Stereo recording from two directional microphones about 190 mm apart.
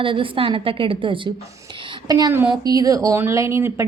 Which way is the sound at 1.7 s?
25° right (ahead or behind).